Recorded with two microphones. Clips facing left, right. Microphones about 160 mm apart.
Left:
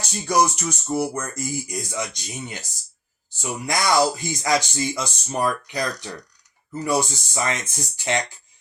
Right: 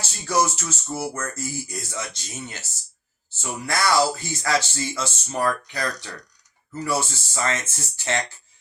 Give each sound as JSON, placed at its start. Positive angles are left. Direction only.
{"t": 0.0, "sound": "speech", "side_deg": 15}